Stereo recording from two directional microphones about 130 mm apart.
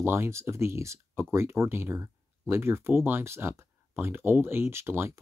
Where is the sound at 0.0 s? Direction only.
20° right (ahead or behind).